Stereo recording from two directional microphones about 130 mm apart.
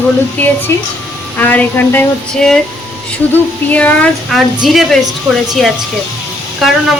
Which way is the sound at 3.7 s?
10° left (ahead or behind).